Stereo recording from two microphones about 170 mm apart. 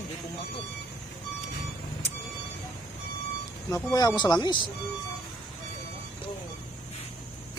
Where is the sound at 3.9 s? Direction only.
25° left (ahead or behind).